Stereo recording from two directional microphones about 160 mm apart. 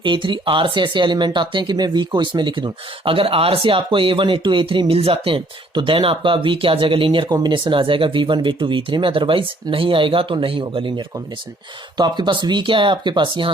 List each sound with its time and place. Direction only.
0.0 s speech: 30° right (ahead or behind)